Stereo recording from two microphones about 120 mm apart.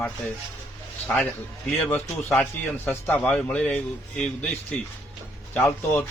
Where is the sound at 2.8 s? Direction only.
15° left (ahead or behind).